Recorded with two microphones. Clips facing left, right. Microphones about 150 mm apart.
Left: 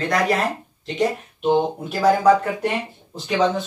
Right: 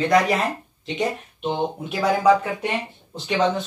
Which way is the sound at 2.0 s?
Centre (ahead or behind).